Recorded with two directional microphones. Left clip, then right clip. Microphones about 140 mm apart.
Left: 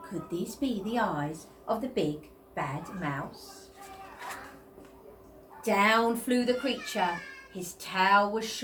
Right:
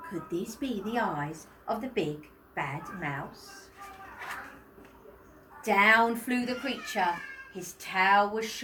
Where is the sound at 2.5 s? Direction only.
15° left (ahead or behind).